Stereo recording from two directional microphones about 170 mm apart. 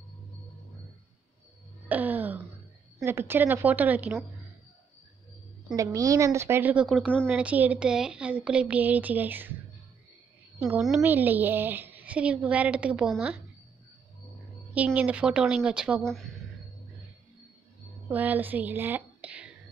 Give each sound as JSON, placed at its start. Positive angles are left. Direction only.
{"t": 1.9, "sound": "a sound", "side_deg": -10}
{"t": 3.0, "sound": "a woman's voice", "side_deg": -15}
{"t": 5.8, "sound": "a woman's voice", "side_deg": -20}
{"t": 7.2, "sound": "a woman's voice", "side_deg": -10}
{"t": 10.6, "sound": "a woman's voice", "side_deg": -5}
{"t": 15.0, "sound": "speech", "side_deg": -10}
{"t": 18.0, "sound": "speech", "side_deg": -10}